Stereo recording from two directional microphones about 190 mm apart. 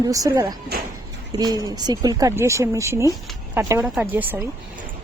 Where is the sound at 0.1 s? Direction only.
15° right (ahead or behind).